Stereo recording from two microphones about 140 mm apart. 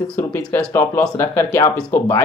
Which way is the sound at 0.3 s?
15° left (ahead or behind).